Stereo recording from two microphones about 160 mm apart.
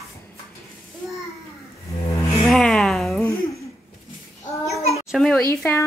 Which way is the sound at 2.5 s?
Centre (ahead or behind).